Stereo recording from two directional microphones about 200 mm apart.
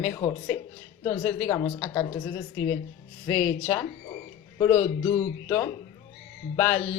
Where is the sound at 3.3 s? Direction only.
25° left (ahead or behind).